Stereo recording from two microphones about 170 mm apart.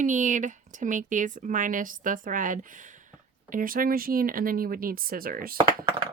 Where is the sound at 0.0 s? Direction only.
50° right (ahead or behind).